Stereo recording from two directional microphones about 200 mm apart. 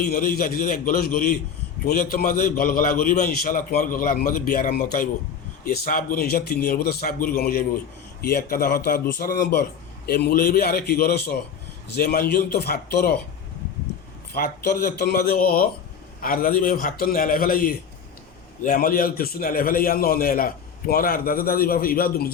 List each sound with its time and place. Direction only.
0.0 s a man's voice: 45° left (ahead or behind)
14.3 s a man's voice: 50° left (ahead or behind)